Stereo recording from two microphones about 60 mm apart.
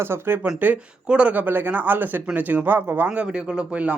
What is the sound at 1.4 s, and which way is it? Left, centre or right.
Speech, right.